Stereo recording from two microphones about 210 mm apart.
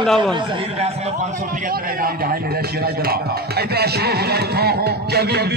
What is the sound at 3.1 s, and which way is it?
Music, 50° right (ahead or behind).